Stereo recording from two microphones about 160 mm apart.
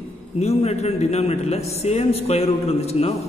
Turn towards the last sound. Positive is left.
turn(degrees=40)  # may be behind; listen again after turning